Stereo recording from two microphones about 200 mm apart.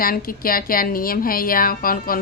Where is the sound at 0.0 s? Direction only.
45° left (ahead or behind).